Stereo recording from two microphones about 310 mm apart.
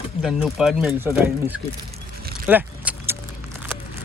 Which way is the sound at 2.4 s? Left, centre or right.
Centre.